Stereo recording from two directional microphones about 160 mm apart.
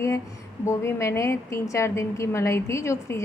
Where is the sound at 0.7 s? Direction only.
15° left (ahead or behind).